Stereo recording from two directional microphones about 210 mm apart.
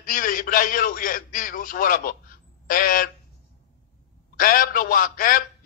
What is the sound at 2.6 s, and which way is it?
Bird, 40° left (ahead or behind).